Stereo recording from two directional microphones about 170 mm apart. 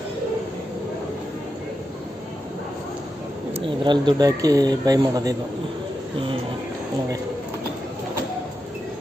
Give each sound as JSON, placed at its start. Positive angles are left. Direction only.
{"t": 3.8, "sound": "speech", "side_deg": -25}